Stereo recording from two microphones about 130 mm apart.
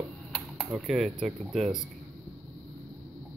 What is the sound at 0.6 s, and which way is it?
Speech, centre (ahead or behind).